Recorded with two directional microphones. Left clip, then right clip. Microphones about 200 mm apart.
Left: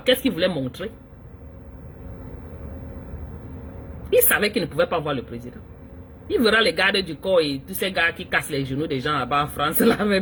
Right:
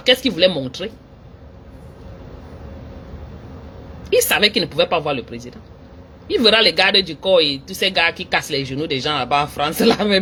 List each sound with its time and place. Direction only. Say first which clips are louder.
0.1 s speech: right 5 dB; 20° left (ahead or behind)
4.1 s speech: right 4 dB; 15° left (ahead or behind)